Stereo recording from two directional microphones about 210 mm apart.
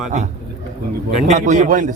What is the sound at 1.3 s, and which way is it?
Speech, 35° right (ahead or behind).